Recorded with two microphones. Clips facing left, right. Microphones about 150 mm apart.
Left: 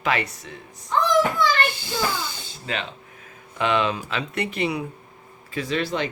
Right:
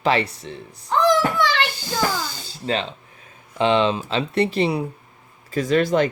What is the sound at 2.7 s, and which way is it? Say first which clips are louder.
Speech: right 6 dB; 30° right (ahead or behind).